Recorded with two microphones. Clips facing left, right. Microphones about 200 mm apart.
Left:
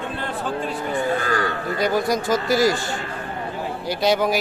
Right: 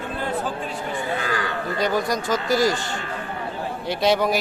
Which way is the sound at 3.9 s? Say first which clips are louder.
Even; centre (ahead or behind).